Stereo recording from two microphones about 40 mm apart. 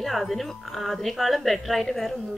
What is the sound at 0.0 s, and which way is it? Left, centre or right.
Speech, centre.